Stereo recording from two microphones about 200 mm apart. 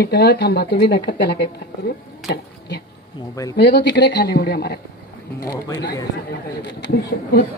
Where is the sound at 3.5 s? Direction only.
55° left (ahead or behind).